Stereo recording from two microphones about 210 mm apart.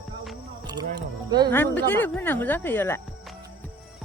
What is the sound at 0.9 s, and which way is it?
Speech, 20° right (ahead or behind).